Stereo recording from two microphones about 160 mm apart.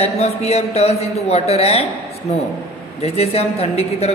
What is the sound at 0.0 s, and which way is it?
A woman's voice, 40° left (ahead or behind).